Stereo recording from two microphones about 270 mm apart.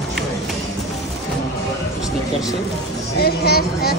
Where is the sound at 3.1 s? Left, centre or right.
Left.